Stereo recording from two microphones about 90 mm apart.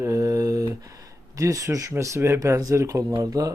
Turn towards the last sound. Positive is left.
turn(degrees=-40)  # may be behind; listen again after turning